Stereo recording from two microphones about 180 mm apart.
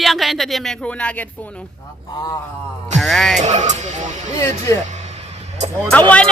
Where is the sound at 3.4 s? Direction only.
40° right (ahead or behind).